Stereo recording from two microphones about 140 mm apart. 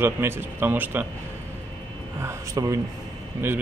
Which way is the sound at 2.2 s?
20° right (ahead or behind).